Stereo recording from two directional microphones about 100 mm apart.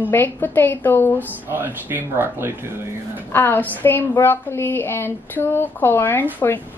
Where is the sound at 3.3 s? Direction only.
20° left (ahead or behind).